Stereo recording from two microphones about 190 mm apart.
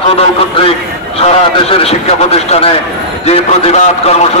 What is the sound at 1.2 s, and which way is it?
Speech, 35° left (ahead or behind).